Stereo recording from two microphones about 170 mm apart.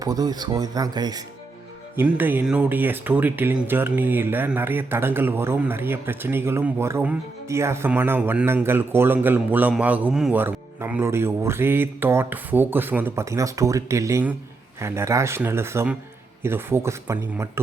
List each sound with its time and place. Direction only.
0.0 s speech: 20° right (ahead or behind)
2.0 s speech: 10° right (ahead or behind)